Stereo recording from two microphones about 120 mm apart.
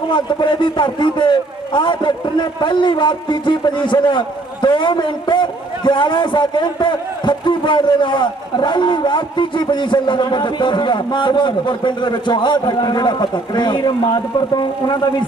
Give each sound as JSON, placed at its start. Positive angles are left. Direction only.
{"t": 0.1, "sound": "a man's voice", "side_deg": 40}